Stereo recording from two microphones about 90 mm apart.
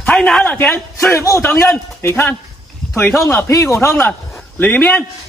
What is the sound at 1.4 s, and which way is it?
A man's voice, 25° left (ahead or behind).